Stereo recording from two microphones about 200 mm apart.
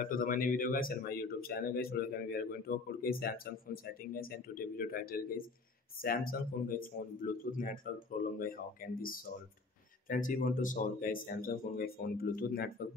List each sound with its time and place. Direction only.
0.0 s speech: 45° left (ahead or behind)